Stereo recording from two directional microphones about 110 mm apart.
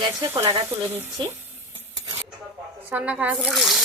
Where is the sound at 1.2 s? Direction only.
45° right (ahead or behind).